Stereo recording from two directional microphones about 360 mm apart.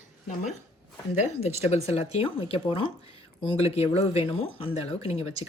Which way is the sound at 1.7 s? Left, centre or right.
Centre.